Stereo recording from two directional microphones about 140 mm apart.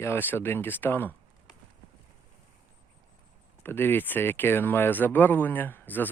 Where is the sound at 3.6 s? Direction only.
15° left (ahead or behind).